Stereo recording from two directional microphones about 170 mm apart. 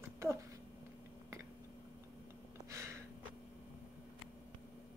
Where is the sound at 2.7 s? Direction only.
15° right (ahead or behind).